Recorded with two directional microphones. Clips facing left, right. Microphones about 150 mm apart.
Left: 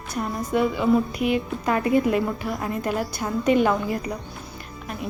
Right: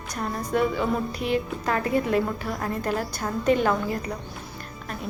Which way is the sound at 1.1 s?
35° right (ahead or behind).